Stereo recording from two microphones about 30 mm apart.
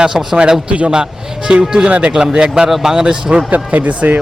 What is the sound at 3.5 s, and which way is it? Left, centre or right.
Speech, right.